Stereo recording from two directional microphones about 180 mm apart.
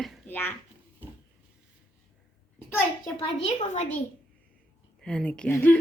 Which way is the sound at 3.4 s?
40° left (ahead or behind).